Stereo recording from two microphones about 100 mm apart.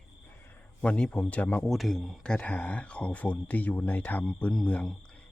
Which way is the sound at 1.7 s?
Centre (ahead or behind).